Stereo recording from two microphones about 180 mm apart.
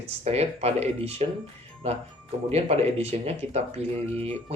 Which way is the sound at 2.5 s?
35° right (ahead or behind).